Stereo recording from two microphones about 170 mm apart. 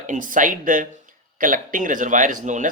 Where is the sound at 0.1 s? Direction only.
50° right (ahead or behind).